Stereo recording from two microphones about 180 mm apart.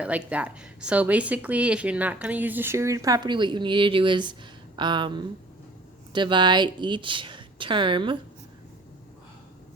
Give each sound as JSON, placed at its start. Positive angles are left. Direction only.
{"t": 0.0, "sound": "a woman's voice", "side_deg": -10}